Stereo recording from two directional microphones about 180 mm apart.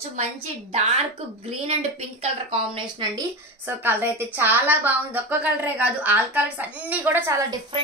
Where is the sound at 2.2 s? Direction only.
30° right (ahead or behind).